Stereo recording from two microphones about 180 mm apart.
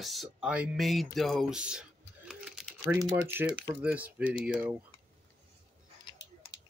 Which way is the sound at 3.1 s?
10° right (ahead or behind).